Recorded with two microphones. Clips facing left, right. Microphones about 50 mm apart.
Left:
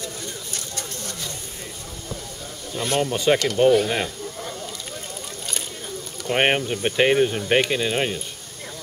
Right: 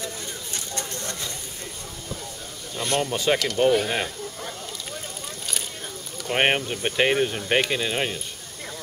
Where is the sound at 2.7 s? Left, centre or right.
Centre.